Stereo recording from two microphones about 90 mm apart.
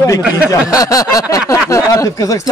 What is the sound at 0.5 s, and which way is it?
Speech, 40° left (ahead or behind).